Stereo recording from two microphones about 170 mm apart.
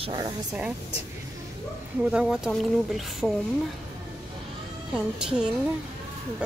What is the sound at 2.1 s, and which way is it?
Speech, centre (ahead or behind).